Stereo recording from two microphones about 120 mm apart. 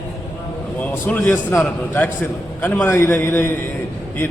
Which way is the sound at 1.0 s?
15° left (ahead or behind).